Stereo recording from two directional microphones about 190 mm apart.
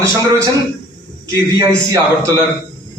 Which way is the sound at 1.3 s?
20° right (ahead or behind).